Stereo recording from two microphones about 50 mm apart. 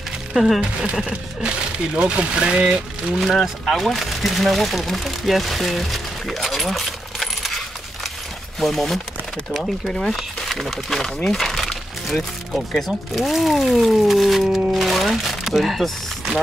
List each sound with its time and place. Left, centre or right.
0.3 s speech: centre
2.0 s speech: centre
3.2 s speech: centre
11.2 s music: centre
13.1 s speech: centre